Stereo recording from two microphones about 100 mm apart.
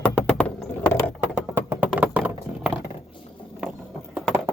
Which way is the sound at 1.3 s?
20° right (ahead or behind).